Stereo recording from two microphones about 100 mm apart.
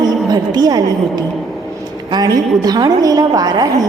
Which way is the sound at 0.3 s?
45° right (ahead or behind).